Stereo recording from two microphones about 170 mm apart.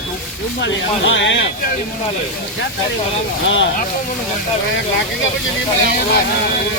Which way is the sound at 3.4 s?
90° left.